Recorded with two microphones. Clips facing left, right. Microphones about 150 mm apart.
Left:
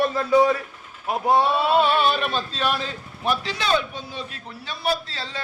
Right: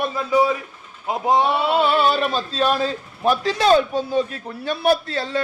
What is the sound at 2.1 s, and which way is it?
A man's voice, 35° right (ahead or behind).